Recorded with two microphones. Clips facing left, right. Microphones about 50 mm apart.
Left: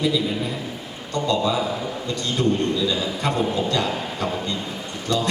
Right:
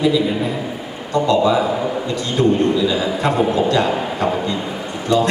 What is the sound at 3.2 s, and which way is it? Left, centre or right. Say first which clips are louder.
A man's voice: right 6 dB; right.